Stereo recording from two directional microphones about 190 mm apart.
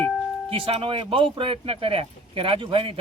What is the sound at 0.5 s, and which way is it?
Speech, 25° right (ahead or behind).